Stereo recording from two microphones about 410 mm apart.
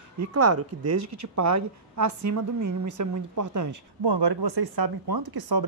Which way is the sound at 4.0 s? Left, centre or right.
Right.